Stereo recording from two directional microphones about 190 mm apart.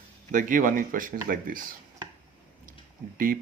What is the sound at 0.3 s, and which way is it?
Speech, 45° right (ahead or behind).